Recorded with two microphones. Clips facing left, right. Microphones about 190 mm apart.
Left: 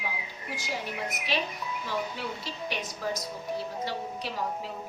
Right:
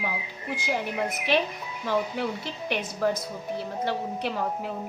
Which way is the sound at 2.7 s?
60° right (ahead or behind).